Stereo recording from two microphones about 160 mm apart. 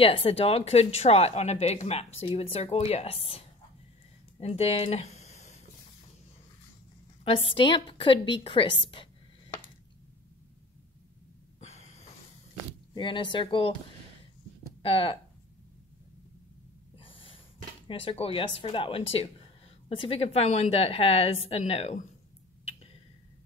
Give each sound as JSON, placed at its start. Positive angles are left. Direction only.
{"t": 0.0, "sound": "speech", "side_deg": 35}
{"t": 4.4, "sound": "a sound", "side_deg": 40}
{"t": 7.2, "sound": "speech", "side_deg": 35}
{"t": 11.6, "sound": "a sound", "side_deg": 40}
{"t": 12.9, "sound": "speech", "side_deg": 30}
{"t": 14.8, "sound": "speech", "side_deg": 35}
{"t": 17.0, "sound": "snort", "side_deg": 35}
{"t": 17.8, "sound": "speech", "side_deg": 35}